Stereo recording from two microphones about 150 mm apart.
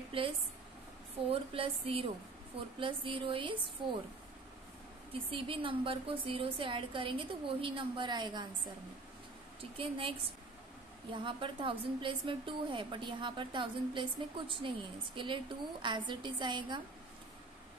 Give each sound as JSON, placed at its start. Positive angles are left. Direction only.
{"t": 0.1, "sound": "a woman's voice", "side_deg": -35}
{"t": 1.3, "sound": "a woman's voice", "side_deg": -40}
{"t": 5.3, "sound": "a woman's voice", "side_deg": -35}
{"t": 9.6, "sound": "a woman's voice", "side_deg": -35}
{"t": 11.2, "sound": "a woman's voice", "side_deg": -35}